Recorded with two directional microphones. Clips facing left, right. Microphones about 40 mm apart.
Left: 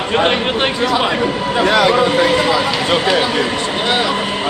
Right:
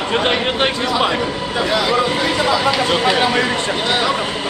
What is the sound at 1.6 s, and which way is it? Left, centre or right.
Speech, left.